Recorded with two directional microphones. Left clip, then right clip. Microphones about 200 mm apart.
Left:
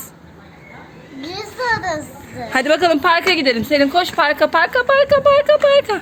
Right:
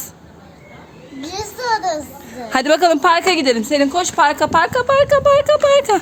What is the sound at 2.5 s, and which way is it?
A woman's voice, 30° right (ahead or behind).